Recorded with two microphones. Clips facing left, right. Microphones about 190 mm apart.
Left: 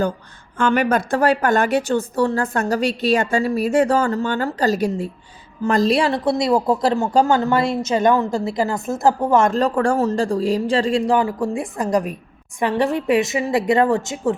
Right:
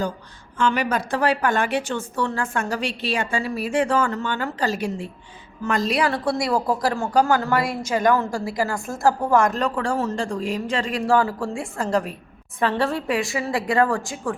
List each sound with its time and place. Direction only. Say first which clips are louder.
0.6 s a woman's voice: left 4 dB; 50° left (ahead or behind); by 9.7 s 30° left (ahead or behind)
9.7 s speech: left 6 dB; 50° left (ahead or behind)
10.1 s a woman's voice: left 6 dB; 35° left (ahead or behind)
11.0 s a woman's voice: left 2 dB; 20° left (ahead or behind)